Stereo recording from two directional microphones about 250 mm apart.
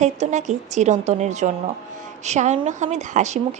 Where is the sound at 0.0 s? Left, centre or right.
Right.